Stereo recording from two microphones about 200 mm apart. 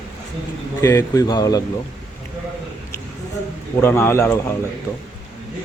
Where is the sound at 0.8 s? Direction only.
15° left (ahead or behind).